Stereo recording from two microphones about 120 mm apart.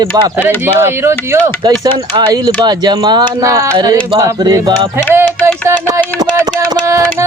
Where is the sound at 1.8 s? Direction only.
35° right (ahead or behind).